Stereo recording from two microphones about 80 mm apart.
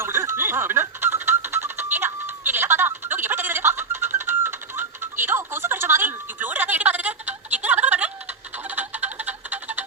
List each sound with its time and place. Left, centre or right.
0.0 s music: right
5.4 s a sound: right
8.7 s music: right